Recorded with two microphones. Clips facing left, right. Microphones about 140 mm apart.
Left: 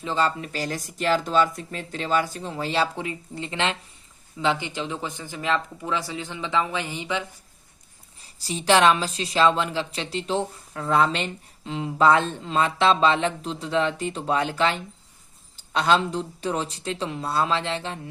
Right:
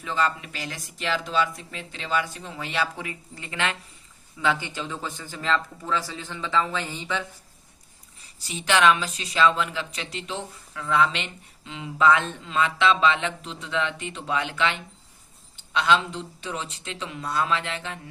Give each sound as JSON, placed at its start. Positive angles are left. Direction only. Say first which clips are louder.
{"t": 0.0, "sound": "speech", "louder": "left 2 dB", "side_deg": 30}
{"t": 8.4, "sound": "speech", "louder": "left 3 dB", "side_deg": 35}